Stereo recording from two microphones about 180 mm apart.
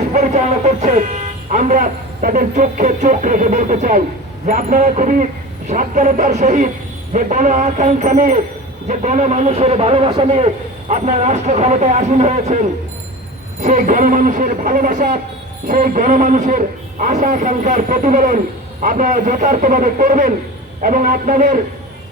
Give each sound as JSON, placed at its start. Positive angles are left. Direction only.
{"t": 0.1, "sound": "music", "side_deg": -40}
{"t": 1.5, "sound": "a man's voice", "side_deg": -45}
{"t": 13.6, "sound": "a man's voice", "side_deg": -45}